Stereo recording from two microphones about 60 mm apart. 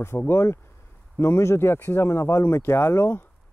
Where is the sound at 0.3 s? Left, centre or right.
Left.